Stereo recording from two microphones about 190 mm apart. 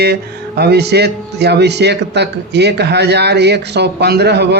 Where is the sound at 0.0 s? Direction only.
60° right (ahead or behind).